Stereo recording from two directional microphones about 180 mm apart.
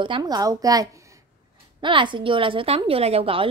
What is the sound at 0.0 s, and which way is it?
A woman's voice, 25° right (ahead or behind).